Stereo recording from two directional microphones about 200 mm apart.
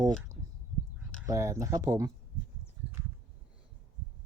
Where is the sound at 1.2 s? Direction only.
15° right (ahead or behind).